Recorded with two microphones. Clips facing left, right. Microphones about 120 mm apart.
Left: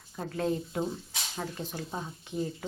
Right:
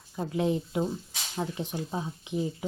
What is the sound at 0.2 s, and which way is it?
Speech, 15° right (ahead or behind).